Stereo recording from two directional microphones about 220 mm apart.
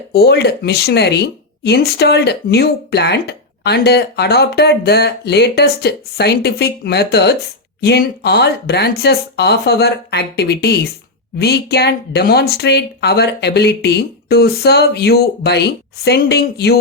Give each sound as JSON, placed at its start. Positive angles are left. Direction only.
{"t": 0.1, "sound": "speech", "side_deg": 50}